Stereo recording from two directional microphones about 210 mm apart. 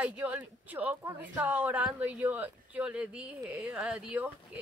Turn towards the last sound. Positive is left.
turn(degrees=-5)  # may be behind; listen again after turning